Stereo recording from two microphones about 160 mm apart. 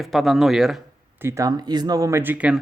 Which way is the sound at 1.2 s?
15° right (ahead or behind).